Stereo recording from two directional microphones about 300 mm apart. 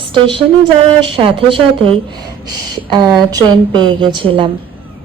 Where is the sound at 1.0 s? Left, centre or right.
Centre.